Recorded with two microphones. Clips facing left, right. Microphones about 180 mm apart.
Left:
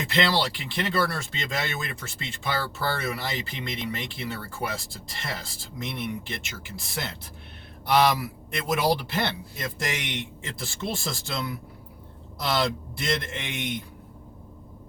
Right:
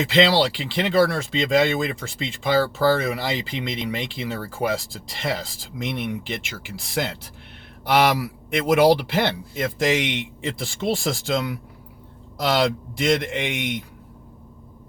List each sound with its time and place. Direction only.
0.0 s speech: 90° right
7.9 s speech: 90° right